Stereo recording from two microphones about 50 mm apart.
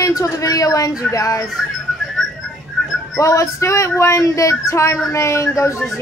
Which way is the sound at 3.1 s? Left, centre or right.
Left.